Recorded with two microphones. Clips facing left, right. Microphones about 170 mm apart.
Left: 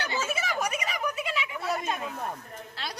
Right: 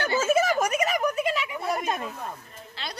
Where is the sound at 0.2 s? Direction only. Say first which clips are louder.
Right 9 dB; 45° right (ahead or behind).